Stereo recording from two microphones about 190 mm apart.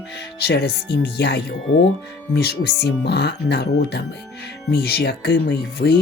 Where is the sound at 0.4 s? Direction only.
60° left (ahead or behind).